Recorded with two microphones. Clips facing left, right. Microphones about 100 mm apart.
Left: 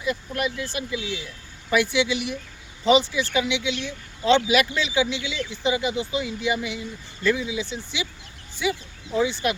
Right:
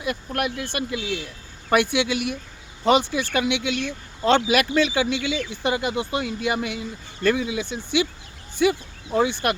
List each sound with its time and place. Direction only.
0.0 s speech: 60° right (ahead or behind)